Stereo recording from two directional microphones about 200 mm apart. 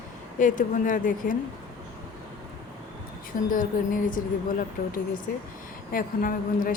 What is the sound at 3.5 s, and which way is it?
Speech, 40° left (ahead or behind).